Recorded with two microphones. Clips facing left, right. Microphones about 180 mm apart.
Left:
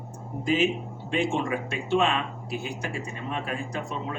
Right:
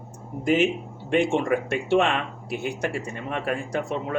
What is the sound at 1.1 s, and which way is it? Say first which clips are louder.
Speech: right 5 dB; 60° right (ahead or behind).